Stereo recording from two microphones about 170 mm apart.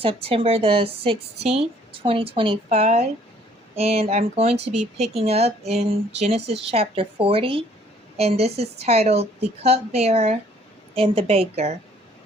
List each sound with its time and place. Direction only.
0.0 s a woman's voice: 35° right (ahead or behind)